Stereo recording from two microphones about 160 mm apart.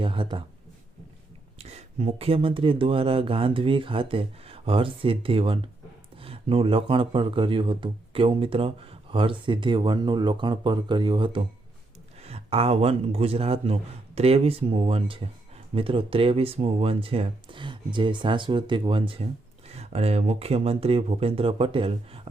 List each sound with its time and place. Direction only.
0.0 s speech: 35° right (ahead or behind)
1.5 s speech: 40° right (ahead or behind)